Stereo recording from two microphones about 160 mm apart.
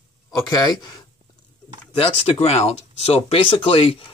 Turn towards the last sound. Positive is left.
turn(degrees=35)  # may be behind; listen again after turning